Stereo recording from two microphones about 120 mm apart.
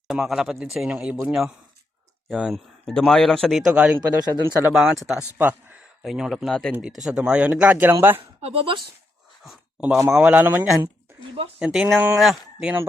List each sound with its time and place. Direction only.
0.1 s a man's voice: 5° right (ahead or behind)
4.0 s speech: 35° right (ahead or behind)
4.7 s a man's voice: centre (ahead or behind)
5.4 s speech: 15° right (ahead or behind)
6.0 s a man's voice: centre (ahead or behind)
6.8 s speech: 5° right (ahead or behind)
8.4 s speech: 55° right (ahead or behind)
9.8 s speech: 15° right (ahead or behind)
10.1 s a man's voice: 5° right (ahead or behind)
10.3 s a man's voice: 15° right (ahead or behind)
11.9 s speech: 15° right (ahead or behind)
12.2 s speech: 5° right (ahead or behind)